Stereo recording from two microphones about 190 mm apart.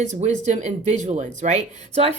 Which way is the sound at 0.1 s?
40° right (ahead or behind).